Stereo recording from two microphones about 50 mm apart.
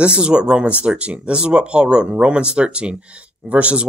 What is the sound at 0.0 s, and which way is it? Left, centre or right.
Speech, right.